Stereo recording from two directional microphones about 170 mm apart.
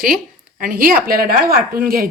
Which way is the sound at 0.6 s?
60° right (ahead or behind).